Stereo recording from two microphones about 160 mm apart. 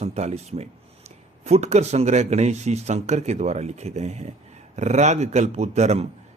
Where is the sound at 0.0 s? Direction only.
40° right (ahead or behind).